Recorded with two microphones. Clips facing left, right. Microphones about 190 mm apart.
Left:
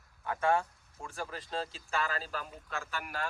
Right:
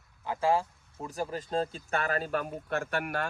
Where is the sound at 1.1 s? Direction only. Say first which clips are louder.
Right 7 dB; 40° right (ahead or behind); by 3.2 s 60° right (ahead or behind).